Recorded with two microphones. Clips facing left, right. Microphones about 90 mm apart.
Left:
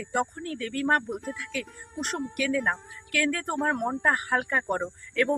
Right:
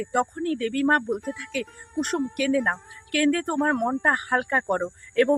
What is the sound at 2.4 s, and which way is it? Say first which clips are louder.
Speech: right 2 dB; 45° right (ahead or behind).